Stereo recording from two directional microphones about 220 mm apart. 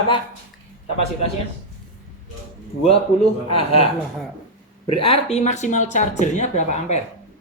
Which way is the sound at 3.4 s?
25° left (ahead or behind).